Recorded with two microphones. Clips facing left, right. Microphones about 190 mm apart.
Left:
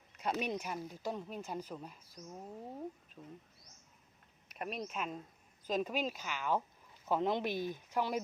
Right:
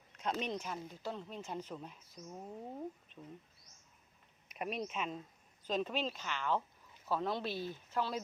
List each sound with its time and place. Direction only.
0.1 s speech: 5° left (ahead or behind)
4.5 s speech: 5° right (ahead or behind); by 8.2 s 15° left (ahead or behind)